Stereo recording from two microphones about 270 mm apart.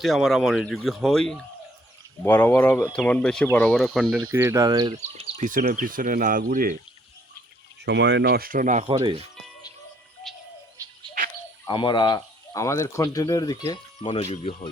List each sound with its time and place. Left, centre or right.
0.0 s speech: centre
5.4 s speech: right
7.9 s speech: right; by 9.2 s centre
11.6 s speech: centre